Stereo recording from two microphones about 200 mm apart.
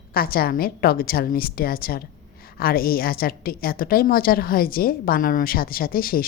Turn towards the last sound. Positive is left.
turn(degrees=45)  # may be behind; listen again after turning